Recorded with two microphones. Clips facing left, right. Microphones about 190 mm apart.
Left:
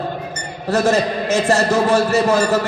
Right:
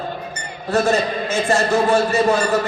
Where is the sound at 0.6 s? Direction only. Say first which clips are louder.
Left 2 dB; 40° left (ahead or behind).